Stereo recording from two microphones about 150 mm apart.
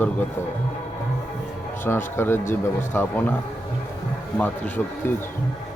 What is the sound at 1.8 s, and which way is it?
A man's voice, 15° left (ahead or behind).